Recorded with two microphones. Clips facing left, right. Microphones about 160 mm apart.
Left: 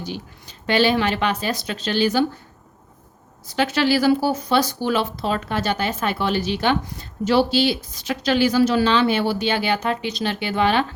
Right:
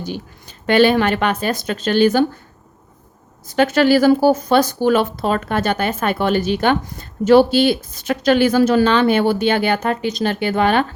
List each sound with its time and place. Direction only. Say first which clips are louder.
0.0 s speech: right 4 dB; 50° right (ahead or behind)
3.4 s speech: right 6 dB; 50° right (ahead or behind)